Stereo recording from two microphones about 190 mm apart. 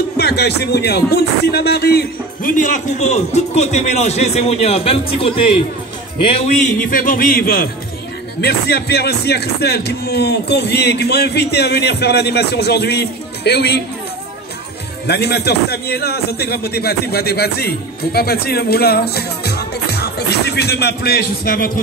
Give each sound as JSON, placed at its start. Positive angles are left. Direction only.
{"t": 0.2, "sound": "a man's voice", "side_deg": 60}
{"t": 6.8, "sound": "a man's voice", "side_deg": 45}
{"t": 15.0, "sound": "a man's voice", "side_deg": 60}